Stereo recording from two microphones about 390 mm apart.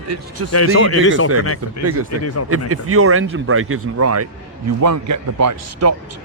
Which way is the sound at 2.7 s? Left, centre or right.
Right.